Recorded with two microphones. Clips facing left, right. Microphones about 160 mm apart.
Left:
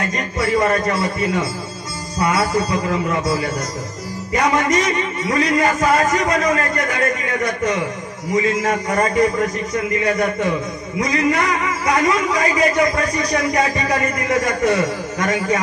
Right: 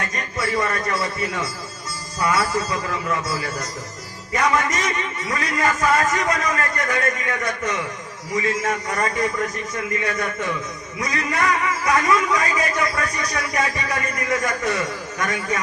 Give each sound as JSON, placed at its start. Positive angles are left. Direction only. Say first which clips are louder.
{"t": 0.1, "sound": "a man's voice", "louder": "left 6 dB", "side_deg": 25}
{"t": 8.3, "sound": "a man's voice", "louder": "left 5 dB", "side_deg": 20}
{"t": 8.6, "sound": "a man's voice", "louder": "left 5 dB", "side_deg": 35}
{"t": 9.8, "sound": "a man's voice", "louder": "left 6 dB", "side_deg": 20}